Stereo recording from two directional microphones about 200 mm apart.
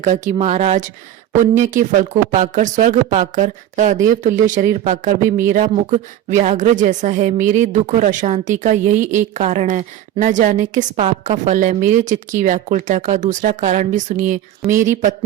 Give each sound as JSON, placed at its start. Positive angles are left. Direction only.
{"t": 0.0, "sound": "speech", "side_deg": -35}